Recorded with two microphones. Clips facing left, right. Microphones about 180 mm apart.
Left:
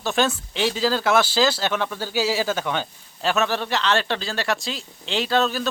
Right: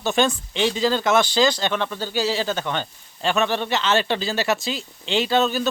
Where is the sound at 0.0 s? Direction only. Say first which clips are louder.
Right 2 dB; centre (ahead or behind).